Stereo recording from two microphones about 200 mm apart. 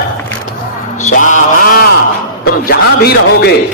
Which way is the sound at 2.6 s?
50° left (ahead or behind).